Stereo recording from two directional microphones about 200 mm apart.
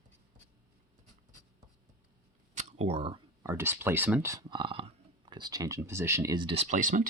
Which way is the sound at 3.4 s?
10° right (ahead or behind).